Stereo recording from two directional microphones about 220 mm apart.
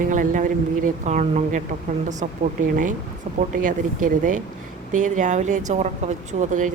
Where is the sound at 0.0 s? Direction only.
35° right (ahead or behind).